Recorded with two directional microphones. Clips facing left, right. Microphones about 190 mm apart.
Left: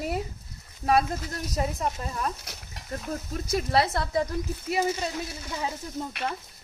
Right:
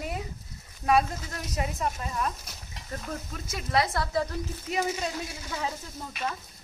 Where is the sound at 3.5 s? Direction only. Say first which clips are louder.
Left 3 dB; 35° left (ahead or behind).